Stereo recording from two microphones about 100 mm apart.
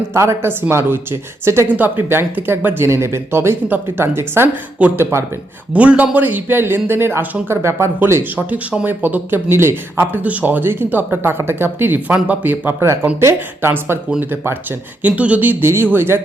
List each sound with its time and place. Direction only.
0.1 s speech: 30° right (ahead or behind)
5.7 s speech: 15° right (ahead or behind)